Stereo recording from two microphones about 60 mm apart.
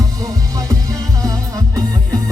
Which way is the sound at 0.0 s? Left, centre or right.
Right.